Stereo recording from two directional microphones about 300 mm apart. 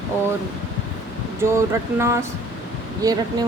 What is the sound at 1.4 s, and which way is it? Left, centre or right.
Speech, centre.